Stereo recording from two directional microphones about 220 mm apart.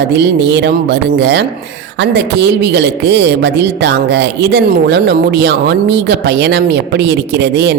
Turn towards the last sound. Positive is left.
turn(degrees=-50)  # may be behind; listen again after turning